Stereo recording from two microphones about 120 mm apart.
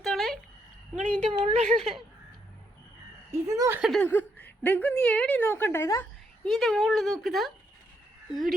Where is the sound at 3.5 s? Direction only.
25° right (ahead or behind).